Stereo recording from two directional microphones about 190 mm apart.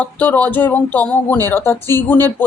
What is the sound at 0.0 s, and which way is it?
A woman's voice, 10° left (ahead or behind).